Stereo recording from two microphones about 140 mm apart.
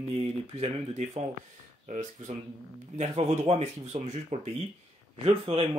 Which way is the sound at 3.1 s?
45° right (ahead or behind).